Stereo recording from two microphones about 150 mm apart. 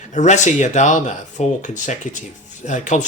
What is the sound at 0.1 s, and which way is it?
Speech, 50° left (ahead or behind).